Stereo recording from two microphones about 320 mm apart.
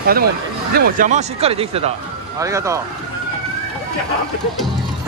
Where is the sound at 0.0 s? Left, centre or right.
Right; by 2.8 s centre.